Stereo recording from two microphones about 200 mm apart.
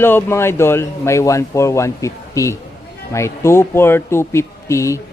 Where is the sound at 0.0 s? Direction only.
10° left (ahead or behind).